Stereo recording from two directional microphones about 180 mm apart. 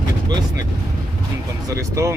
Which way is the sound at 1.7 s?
15° right (ahead or behind).